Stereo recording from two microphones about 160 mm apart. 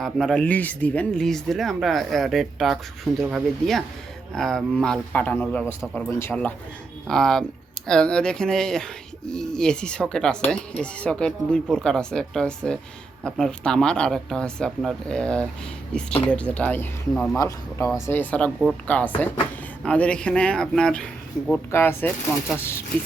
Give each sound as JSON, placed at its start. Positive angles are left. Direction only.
{"t": 0.0, "sound": "speech", "side_deg": 0}
{"t": 17.3, "sound": "speech", "side_deg": 20}